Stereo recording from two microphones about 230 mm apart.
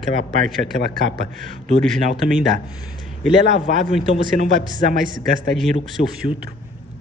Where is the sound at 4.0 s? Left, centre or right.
Right.